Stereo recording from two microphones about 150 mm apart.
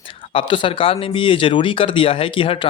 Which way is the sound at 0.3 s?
35° left (ahead or behind).